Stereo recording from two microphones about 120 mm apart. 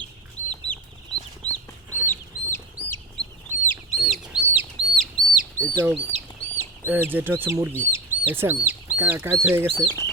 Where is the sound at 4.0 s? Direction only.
Centre (ahead or behind).